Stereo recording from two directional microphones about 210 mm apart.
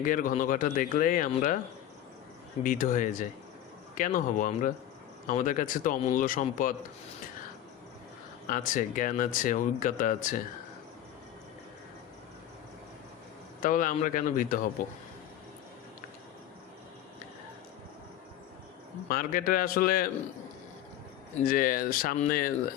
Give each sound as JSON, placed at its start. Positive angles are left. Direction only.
{"t": 0.0, "sound": "speech", "side_deg": 40}
{"t": 2.6, "sound": "speech", "side_deg": 40}
{"t": 8.4, "sound": "speech", "side_deg": 40}
{"t": 13.6, "sound": "speech", "side_deg": 40}
{"t": 19.0, "sound": "speech", "side_deg": 45}
{"t": 21.3, "sound": "speech", "side_deg": 40}